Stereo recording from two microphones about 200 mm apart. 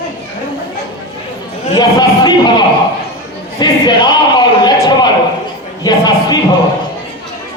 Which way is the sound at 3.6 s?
20° left (ahead or behind).